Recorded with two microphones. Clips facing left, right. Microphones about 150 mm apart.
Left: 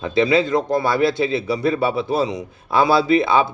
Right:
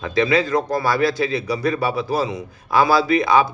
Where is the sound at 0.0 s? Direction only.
25° left (ahead or behind).